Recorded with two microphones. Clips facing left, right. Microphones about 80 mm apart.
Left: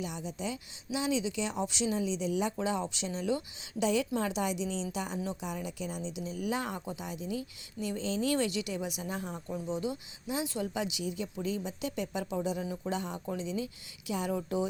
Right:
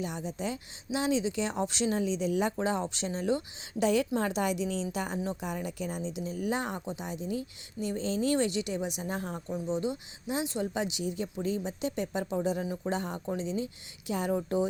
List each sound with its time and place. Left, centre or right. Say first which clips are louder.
0.0 s a woman's voice: right 3 dB; right
12.6 s speech: right 3 dB; right
12.9 s a woman's voice: right 2 dB; right